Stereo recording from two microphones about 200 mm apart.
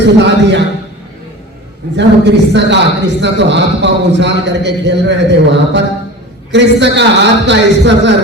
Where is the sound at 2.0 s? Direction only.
60° right (ahead or behind).